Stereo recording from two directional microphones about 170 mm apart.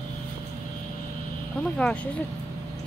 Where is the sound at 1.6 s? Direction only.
5° left (ahead or behind).